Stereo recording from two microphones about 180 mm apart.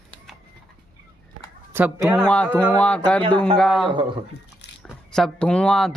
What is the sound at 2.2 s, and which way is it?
Speech, 5° left (ahead or behind).